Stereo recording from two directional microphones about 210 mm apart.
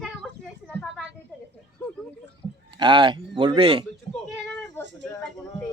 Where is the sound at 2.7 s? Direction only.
20° right (ahead or behind).